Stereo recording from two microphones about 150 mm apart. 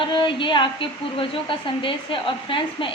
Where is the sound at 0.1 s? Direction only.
35° left (ahead or behind).